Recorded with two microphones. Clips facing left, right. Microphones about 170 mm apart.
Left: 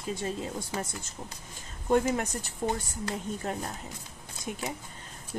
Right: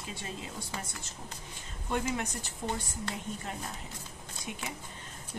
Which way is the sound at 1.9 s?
45° left (ahead or behind).